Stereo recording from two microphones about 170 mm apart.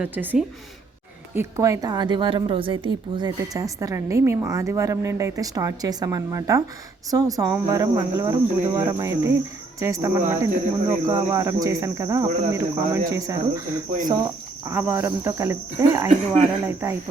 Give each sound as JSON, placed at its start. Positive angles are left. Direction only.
{"t": 0.0, "sound": "cricket", "side_deg": -10}
{"t": 1.4, "sound": "a woman's voice", "side_deg": -15}
{"t": 9.8, "sound": "cricket", "side_deg": -15}
{"t": 13.1, "sound": "a woman's voice", "side_deg": -20}
{"t": 14.7, "sound": "cricket", "side_deg": -15}